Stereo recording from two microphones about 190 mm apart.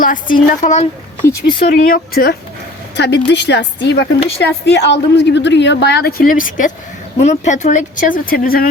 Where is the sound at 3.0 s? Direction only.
65° left (ahead or behind).